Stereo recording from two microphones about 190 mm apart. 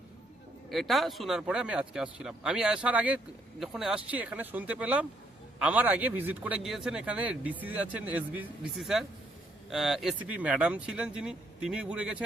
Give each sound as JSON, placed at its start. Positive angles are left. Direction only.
{"t": 0.7, "sound": "a man's voice", "side_deg": 0}